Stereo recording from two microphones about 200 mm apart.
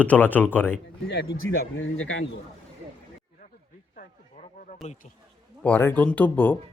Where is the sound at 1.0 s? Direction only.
55° left (ahead or behind); by 2.2 s 75° left (ahead or behind).